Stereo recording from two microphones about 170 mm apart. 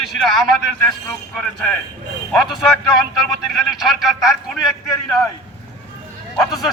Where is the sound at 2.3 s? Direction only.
Centre (ahead or behind).